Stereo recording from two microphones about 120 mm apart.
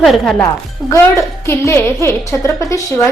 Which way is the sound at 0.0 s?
Centre (ahead or behind).